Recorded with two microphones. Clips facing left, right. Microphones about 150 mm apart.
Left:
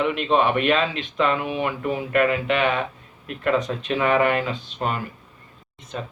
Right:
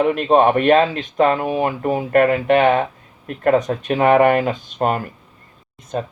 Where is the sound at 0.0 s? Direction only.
45° right (ahead or behind).